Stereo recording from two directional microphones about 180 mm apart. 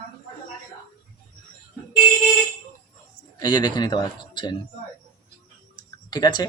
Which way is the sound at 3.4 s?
25° left (ahead or behind).